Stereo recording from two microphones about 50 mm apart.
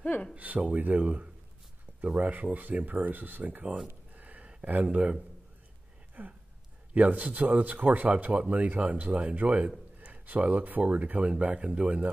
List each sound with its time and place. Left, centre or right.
0.0 s speech: left
0.3 s speech: right
3.8 s a sound: right
4.9 s speech: right